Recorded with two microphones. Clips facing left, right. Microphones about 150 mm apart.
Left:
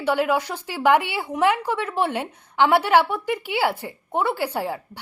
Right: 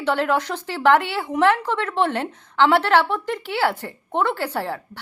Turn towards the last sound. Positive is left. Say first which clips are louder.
# even
turn(degrees=10)  # may be behind; listen again after turning